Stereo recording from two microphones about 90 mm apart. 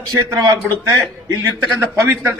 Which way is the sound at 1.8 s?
25° right (ahead or behind).